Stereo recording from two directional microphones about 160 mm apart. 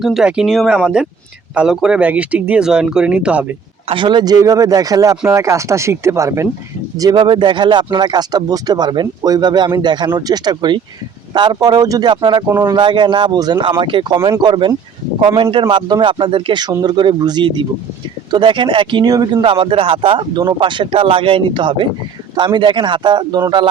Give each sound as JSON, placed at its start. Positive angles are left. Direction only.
{"t": 0.0, "sound": "speech", "side_deg": 0}
{"t": 3.8, "sound": "speech", "side_deg": -30}
{"t": 14.2, "sound": "speech", "side_deg": -20}